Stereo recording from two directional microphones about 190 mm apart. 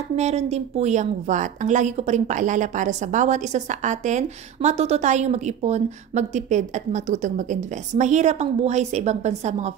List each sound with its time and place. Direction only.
0.1 s a woman's voice: 35° right (ahead or behind)